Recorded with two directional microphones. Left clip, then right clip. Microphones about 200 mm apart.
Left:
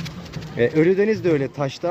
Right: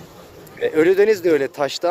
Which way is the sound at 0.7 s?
20° right (ahead or behind).